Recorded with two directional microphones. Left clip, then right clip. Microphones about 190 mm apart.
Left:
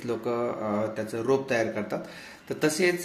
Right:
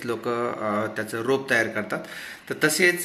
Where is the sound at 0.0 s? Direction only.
Centre (ahead or behind).